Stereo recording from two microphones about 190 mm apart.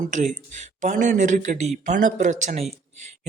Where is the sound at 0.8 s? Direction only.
40° right (ahead or behind).